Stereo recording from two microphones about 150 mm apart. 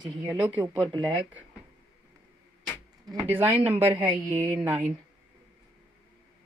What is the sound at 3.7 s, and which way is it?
Speech, 40° right (ahead or behind).